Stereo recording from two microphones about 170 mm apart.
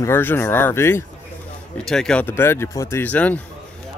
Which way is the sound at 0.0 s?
15° left (ahead or behind).